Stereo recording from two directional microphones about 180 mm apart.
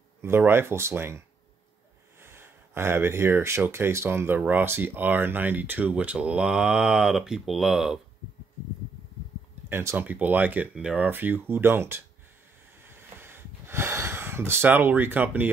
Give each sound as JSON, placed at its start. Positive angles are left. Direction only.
{"t": 0.2, "sound": "speech", "side_deg": -15}
{"t": 9.7, "sound": "speech", "side_deg": -15}
{"t": 12.8, "sound": "a sound", "side_deg": -10}